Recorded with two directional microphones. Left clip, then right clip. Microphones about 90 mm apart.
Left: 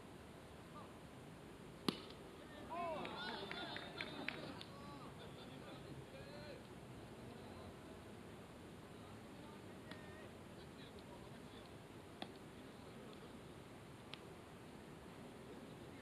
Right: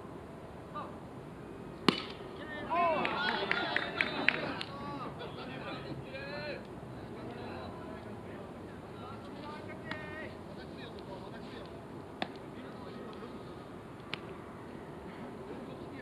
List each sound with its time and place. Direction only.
1.9 s a sound: centre (ahead or behind)
2.5 s boat: 15° right (ahead or behind)
3.3 s run: 20° right (ahead or behind)
5.7 s boat: 20° right (ahead or behind)